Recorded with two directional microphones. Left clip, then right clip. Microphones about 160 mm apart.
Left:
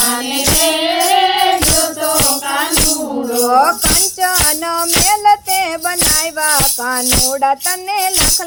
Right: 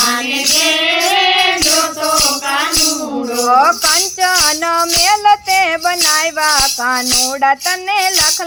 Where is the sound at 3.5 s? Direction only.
40° left (ahead or behind).